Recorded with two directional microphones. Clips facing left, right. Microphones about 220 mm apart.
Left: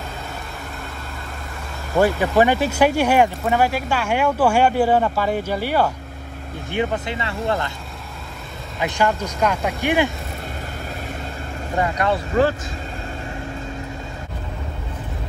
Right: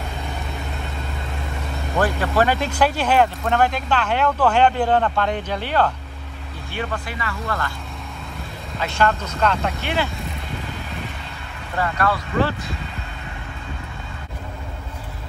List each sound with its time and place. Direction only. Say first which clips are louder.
2.0 s speech: left 4 dB; 15° left (ahead or behind)
8.7 s speech: left 1 dB; 15° left (ahead or behind)
11.8 s speech: left 2 dB; 20° left (ahead or behind)
12.4 s speech: left 5 dB; 45° left (ahead or behind)